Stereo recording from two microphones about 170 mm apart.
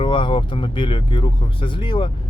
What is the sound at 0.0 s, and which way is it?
Speech, 30° left (ahead or behind).